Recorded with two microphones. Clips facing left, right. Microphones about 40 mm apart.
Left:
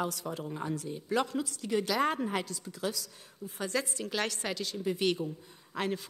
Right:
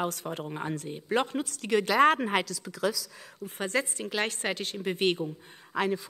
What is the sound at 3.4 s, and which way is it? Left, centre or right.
A woman's voice, right.